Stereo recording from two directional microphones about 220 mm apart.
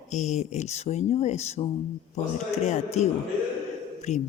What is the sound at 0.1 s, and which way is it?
Speech, 30° left (ahead or behind).